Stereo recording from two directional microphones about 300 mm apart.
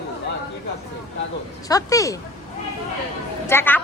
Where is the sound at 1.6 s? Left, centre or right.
Centre.